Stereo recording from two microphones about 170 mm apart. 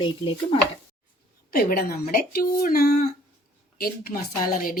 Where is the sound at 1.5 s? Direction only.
60° left (ahead or behind).